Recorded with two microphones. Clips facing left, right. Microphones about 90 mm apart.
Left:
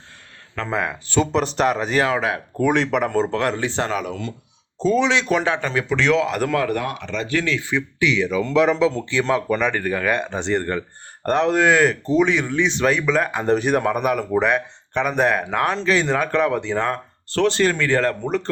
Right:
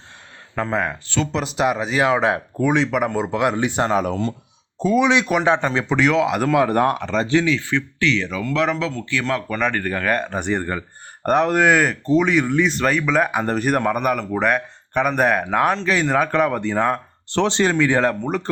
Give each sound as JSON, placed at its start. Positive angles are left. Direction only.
{"t": 0.7, "sound": "speech", "side_deg": 0}
{"t": 2.0, "sound": "speech", "side_deg": -25}
{"t": 2.6, "sound": "speech", "side_deg": 0}
{"t": 3.9, "sound": "speech", "side_deg": -35}
{"t": 4.8, "sound": "speech", "side_deg": -15}
{"t": 5.5, "sound": "speech", "side_deg": -25}
{"t": 6.0, "sound": "speech", "side_deg": -5}
{"t": 6.7, "sound": "speech", "side_deg": -40}
{"t": 7.6, "sound": "speech", "side_deg": 15}
{"t": 9.6, "sound": "speech", "side_deg": 5}
{"t": 10.4, "sound": "speech", "side_deg": -10}